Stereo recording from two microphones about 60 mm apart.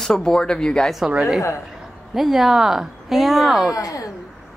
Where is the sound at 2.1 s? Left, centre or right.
Centre.